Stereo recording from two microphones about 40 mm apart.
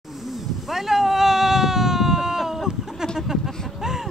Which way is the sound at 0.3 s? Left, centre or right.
Centre.